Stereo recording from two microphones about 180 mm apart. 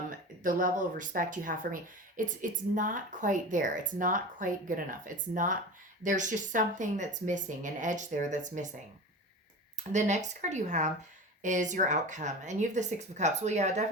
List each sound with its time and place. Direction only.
0.1 s speech: 50° right (ahead or behind)
9.9 s speech: 40° right (ahead or behind)